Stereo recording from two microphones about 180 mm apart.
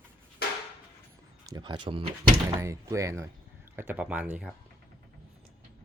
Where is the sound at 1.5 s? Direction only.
25° right (ahead or behind).